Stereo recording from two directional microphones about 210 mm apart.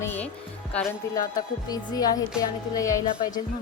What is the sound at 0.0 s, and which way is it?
Music, 10° left (ahead or behind).